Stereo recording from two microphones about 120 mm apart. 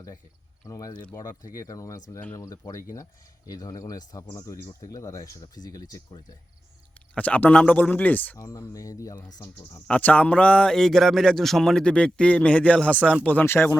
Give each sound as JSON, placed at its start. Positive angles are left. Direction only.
{"t": 0.7, "sound": "speech", "side_deg": 30}
{"t": 7.1, "sound": "a man's voice", "side_deg": 10}
{"t": 8.4, "sound": "speech", "side_deg": 25}
{"t": 9.8, "sound": "a man's voice", "side_deg": 10}